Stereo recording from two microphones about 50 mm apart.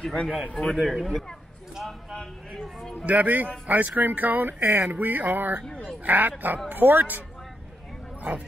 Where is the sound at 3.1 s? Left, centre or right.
Right.